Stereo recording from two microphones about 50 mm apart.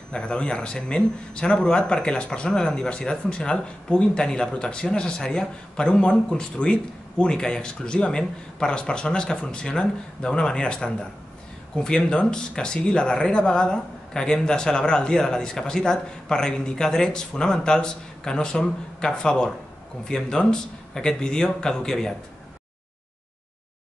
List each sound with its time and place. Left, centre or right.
0.1 s speech: centre